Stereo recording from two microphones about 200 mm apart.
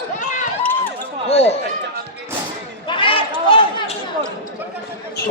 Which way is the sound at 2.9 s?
25° left (ahead or behind).